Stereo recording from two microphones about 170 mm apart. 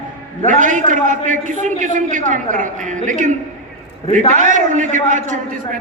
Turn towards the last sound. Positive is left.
turn(degrees=-50)  # may be behind; listen again after turning